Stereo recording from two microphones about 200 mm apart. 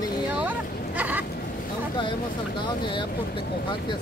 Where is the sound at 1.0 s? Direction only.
10° right (ahead or behind).